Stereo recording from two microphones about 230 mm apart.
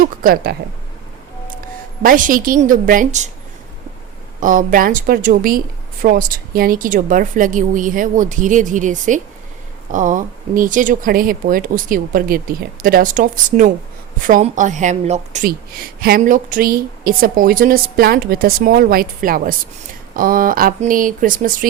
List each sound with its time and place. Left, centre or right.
0.0 s speech: right
2.0 s speech: right
4.4 s speech: right